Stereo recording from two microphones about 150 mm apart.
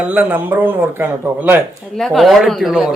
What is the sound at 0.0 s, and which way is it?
Speech, 10° right (ahead or behind).